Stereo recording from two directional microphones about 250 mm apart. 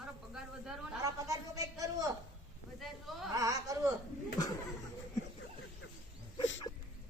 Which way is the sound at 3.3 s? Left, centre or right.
Centre.